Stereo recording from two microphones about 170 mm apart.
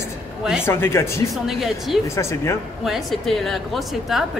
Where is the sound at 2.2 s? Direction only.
15° left (ahead or behind).